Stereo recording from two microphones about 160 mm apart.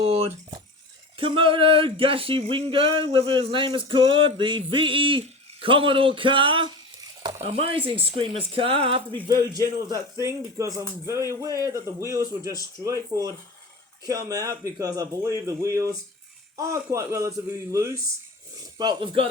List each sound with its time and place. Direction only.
0.0 s a sound: 40° right (ahead or behind)
1.1 s male singing: 35° right (ahead or behind)
9.2 s speech: 25° right (ahead or behind)
18.8 s male singing: 30° right (ahead or behind)